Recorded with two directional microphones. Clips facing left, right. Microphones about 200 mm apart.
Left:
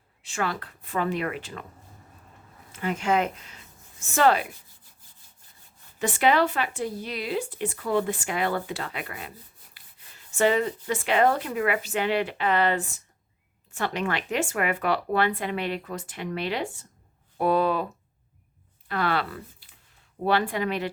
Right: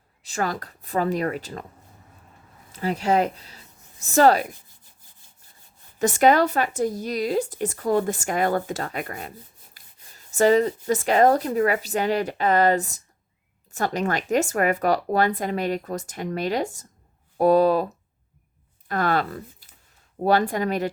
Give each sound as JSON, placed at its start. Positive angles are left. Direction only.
{"t": 0.2, "sound": "speech", "side_deg": -40}
{"t": 2.7, "sound": "speech", "side_deg": -35}
{"t": 6.0, "sound": "speech", "side_deg": -45}
{"t": 18.9, "sound": "speech", "side_deg": -45}